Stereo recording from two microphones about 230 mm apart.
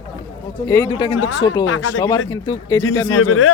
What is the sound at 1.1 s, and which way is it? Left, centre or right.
Speech, left.